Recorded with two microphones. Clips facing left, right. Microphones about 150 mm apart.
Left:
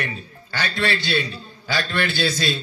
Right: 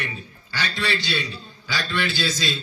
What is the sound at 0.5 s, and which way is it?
A man's voice, 55° left (ahead or behind).